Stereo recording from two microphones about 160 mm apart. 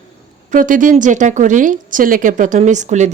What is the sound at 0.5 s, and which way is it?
Speech, 55° right (ahead or behind).